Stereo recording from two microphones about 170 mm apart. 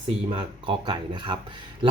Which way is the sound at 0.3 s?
30° right (ahead or behind).